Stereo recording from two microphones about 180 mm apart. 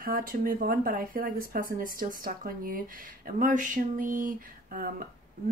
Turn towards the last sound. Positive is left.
turn(degrees=-50)  # may be behind; listen again after turning